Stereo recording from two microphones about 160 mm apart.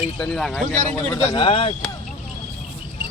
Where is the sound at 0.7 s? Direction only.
15° left (ahead or behind).